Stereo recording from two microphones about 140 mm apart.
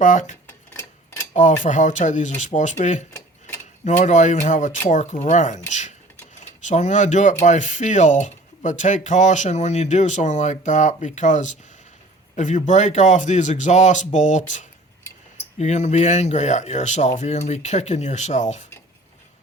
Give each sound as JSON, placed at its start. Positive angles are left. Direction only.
{"t": 0.0, "sound": "speech", "side_deg": 60}
{"t": 0.4, "sound": "tick-tock", "side_deg": 15}
{"t": 1.3, "sound": "cutlery", "side_deg": 60}
{"t": 1.6, "sound": "speech", "side_deg": 60}
{"t": 3.1, "sound": "a sound", "side_deg": 15}
{"t": 3.8, "sound": "speech", "side_deg": 60}